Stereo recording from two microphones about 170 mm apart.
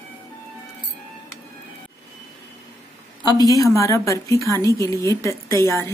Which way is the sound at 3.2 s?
20° left (ahead or behind).